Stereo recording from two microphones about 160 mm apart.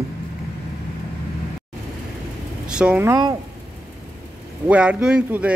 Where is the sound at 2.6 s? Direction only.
5° right (ahead or behind).